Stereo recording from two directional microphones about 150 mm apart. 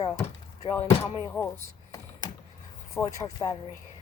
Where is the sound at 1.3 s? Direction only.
15° left (ahead or behind).